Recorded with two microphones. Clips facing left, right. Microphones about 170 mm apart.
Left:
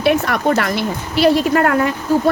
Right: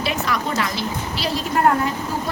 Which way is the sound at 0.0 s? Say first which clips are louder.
Left 8 dB; 60° left (ahead or behind).